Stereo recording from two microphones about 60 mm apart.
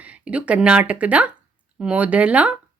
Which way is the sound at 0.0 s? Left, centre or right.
Right.